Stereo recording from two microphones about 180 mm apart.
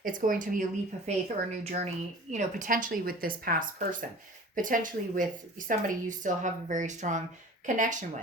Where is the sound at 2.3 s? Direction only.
45° right (ahead or behind).